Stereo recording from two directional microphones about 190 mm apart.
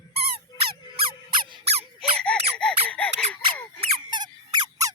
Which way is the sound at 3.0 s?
5° left (ahead or behind).